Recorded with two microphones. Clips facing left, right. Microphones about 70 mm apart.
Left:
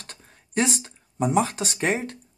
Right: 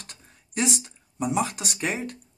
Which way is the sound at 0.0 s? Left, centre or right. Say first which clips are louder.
Left 3 dB; left.